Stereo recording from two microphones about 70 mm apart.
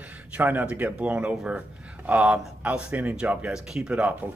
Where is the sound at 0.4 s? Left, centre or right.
Right.